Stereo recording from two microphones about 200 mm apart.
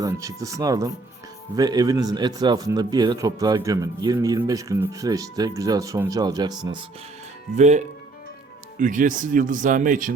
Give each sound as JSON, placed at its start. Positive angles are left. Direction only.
{"t": 0.0, "sound": "a man's voice", "side_deg": -15}
{"t": 7.5, "sound": "speech", "side_deg": -35}